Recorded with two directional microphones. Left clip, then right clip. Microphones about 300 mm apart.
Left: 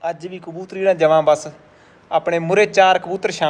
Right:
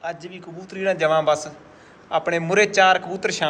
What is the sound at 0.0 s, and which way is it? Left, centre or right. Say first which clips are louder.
A man's voice: left 6 dB; centre.